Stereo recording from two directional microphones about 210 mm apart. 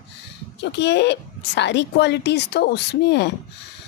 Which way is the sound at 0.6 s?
55° left (ahead or behind).